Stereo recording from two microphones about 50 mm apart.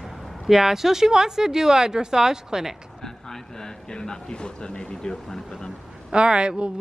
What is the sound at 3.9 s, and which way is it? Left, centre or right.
Speech, centre.